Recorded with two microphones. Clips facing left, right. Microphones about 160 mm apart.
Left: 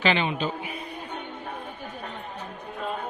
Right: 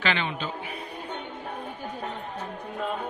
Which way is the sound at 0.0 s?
15° left (ahead or behind).